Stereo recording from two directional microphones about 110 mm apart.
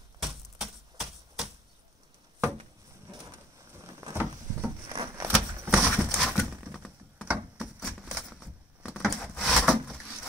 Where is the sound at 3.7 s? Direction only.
25° right (ahead or behind).